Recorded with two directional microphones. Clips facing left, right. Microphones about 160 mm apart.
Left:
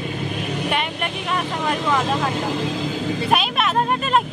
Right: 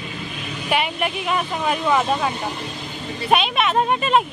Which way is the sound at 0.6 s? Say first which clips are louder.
Right 6 dB; 5° right (ahead or behind).